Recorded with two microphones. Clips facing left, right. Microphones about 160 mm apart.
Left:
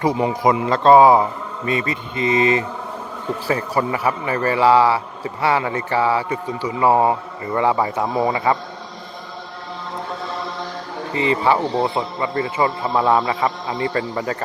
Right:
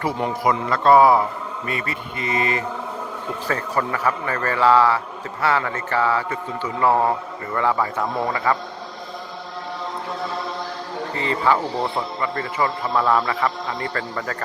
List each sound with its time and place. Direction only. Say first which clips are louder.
0.7 s a man's voice: left 3 dB; 25° left (ahead or behind)
11.1 s speech: left 3 dB; 15° left (ahead or behind)